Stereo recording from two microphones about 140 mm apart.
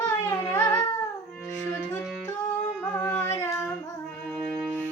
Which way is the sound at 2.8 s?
10° left (ahead or behind).